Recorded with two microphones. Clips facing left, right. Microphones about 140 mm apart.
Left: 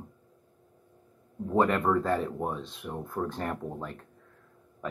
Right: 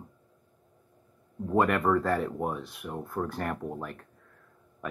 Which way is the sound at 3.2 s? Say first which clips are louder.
Left 1 dB; 20° left (ahead or behind).